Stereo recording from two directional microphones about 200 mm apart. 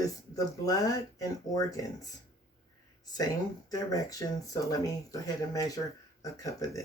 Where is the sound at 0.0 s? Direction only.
15° left (ahead or behind).